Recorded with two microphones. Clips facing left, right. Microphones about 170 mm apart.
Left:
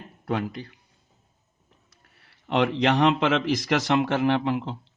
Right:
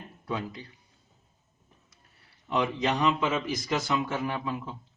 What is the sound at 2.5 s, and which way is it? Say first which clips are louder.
Speech: left 5 dB; 75° left (ahead or behind).